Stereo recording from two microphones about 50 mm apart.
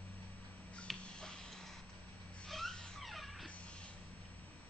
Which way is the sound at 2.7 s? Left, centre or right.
Centre.